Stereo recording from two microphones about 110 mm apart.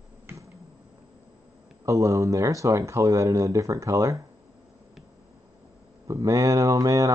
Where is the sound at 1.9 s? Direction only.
30° right (ahead or behind).